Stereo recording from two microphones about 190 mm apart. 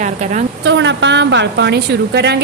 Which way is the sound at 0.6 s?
70° right (ahead or behind).